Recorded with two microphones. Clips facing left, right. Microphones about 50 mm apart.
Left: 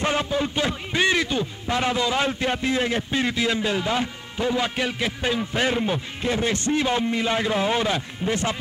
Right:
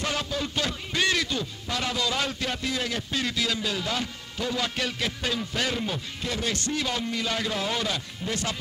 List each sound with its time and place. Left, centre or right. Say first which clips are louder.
0.0 s speech: left 6 dB; left